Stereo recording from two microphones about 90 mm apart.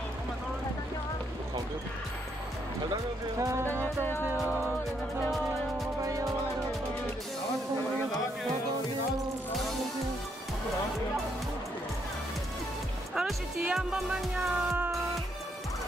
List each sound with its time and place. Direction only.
2.9 s speech: 35° right (ahead or behind)
3.8 s music: 25° left (ahead or behind)
4.3 s music: 20° right (ahead or behind)
13.1 s speech: 5° right (ahead or behind)